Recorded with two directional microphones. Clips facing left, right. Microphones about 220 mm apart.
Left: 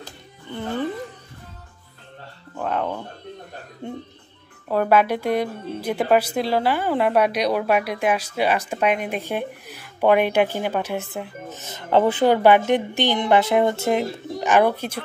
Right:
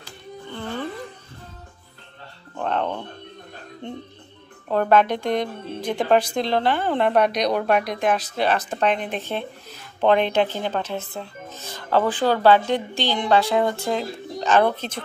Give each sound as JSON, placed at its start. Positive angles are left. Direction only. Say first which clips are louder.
{"t": 0.5, "sound": "music", "louder": "left 4 dB", "side_deg": 15}
{"t": 2.5, "sound": "music", "louder": "even", "side_deg": 5}
{"t": 4.6, "sound": "a woman's voice", "louder": "even", "side_deg": 10}